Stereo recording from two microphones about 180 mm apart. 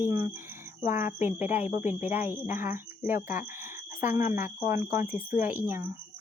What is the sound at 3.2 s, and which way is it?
Speech, 45° left (ahead or behind).